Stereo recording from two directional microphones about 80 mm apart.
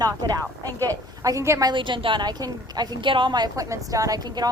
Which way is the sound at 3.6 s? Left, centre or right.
Right.